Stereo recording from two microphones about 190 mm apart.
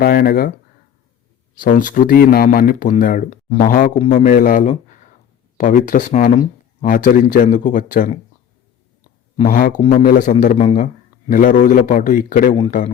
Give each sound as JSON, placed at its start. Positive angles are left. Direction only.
{"t": 0.0, "sound": "speech", "side_deg": 50}
{"t": 1.5, "sound": "speech", "side_deg": 45}
{"t": 9.4, "sound": "speech", "side_deg": 45}